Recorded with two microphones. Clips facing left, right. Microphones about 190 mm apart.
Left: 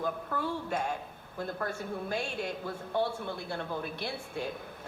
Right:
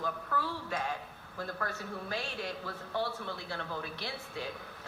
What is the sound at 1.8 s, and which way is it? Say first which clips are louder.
Speech: left 4 dB; 50° left (ahead or behind).